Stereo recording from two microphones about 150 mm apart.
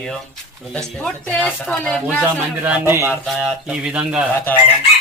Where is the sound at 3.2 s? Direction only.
5° right (ahead or behind).